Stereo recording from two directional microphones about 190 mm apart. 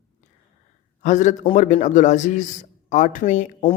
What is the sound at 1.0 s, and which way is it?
A man's voice, 40° left (ahead or behind).